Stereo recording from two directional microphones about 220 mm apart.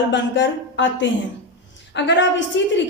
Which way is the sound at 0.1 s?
55° left (ahead or behind).